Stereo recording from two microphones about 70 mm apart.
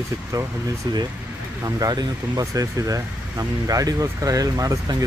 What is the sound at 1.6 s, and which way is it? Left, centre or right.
Speech, right.